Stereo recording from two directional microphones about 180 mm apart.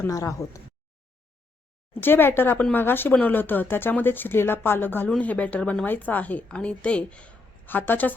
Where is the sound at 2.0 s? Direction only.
10° left (ahead or behind).